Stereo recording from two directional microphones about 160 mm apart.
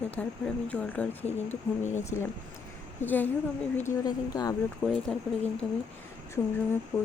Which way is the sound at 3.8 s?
25° left (ahead or behind).